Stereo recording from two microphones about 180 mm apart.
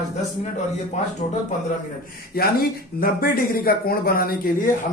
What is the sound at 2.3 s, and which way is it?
A man's voice, 55° left (ahead or behind).